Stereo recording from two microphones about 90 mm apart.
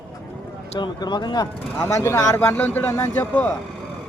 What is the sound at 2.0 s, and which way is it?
Speech, 35° left (ahead or behind).